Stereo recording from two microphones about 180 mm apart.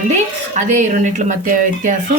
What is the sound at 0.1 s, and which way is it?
A woman's voice, 40° right (ahead or behind).